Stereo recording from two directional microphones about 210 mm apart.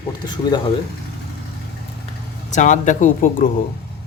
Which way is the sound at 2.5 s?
35° left (ahead or behind).